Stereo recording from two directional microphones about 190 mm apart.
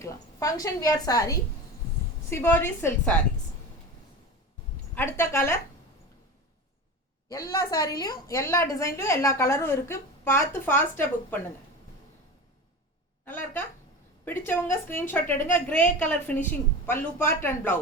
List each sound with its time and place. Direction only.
0.0 s a woman's voice: 15° left (ahead or behind)
4.9 s a woman's voice: 15° left (ahead or behind)
7.3 s a woman's voice: 20° left (ahead or behind)
13.2 s a woman's voice: 10° left (ahead or behind)